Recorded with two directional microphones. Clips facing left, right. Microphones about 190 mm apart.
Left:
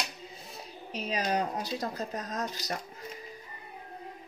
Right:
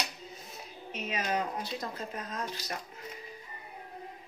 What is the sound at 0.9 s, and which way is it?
A woman's voice, 35° left (ahead or behind).